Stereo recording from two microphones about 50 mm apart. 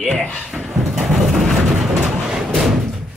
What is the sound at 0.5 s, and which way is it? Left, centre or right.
Vehicle, centre.